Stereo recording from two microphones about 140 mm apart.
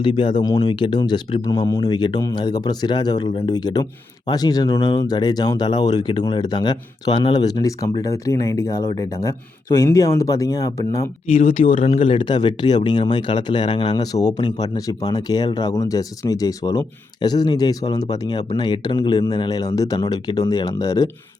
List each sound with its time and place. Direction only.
0.0 s speech: 35° left (ahead or behind)
11.3 s speech: 45° left (ahead or behind); by 21.1 s 25° left (ahead or behind)